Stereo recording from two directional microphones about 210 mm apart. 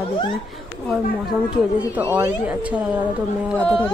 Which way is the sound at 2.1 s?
10° right (ahead or behind).